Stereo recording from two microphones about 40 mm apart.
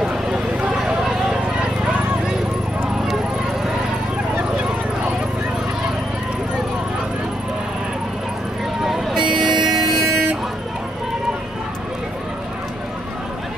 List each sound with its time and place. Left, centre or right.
0.0 s clip-clop: centre
8.9 s vehicle: centre